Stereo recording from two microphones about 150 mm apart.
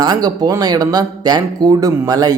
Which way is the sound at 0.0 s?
25° right (ahead or behind).